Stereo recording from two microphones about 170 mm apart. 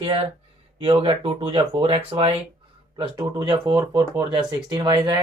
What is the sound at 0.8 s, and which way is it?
Speech, 35° right (ahead or behind).